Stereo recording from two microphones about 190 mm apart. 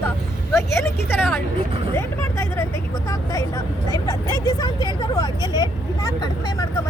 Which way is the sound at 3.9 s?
20° left (ahead or behind).